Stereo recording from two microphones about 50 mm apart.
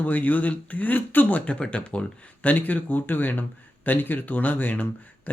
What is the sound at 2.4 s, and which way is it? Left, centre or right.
A man's voice, left.